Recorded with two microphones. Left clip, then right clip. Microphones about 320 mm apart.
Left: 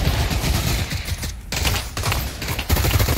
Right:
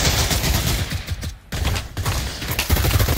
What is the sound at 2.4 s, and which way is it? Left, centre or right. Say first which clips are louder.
Fusillade: right 1 dB; centre.